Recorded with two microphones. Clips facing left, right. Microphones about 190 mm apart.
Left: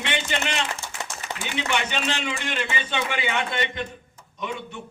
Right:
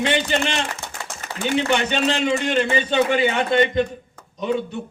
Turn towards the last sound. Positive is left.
turn(degrees=-40)  # may be behind; listen again after turning